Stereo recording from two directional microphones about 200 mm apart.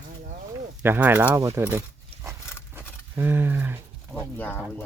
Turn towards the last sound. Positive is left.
turn(degrees=10)  # may be behind; listen again after turning